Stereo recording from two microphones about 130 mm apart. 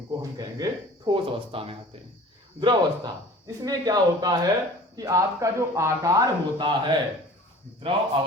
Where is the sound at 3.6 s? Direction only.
30° right (ahead or behind).